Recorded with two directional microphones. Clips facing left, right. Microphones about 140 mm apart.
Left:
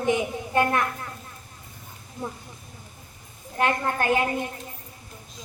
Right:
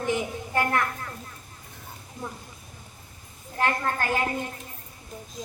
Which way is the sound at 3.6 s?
20° left (ahead or behind).